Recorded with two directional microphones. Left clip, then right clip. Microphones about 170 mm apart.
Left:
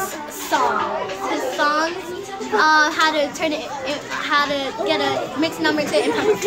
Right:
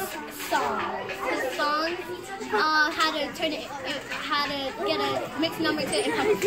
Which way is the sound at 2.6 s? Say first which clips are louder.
Left 8 dB; 20° left (ahead or behind).